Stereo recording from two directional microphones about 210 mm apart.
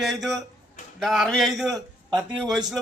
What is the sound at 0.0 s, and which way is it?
A man's voice, centre (ahead or behind).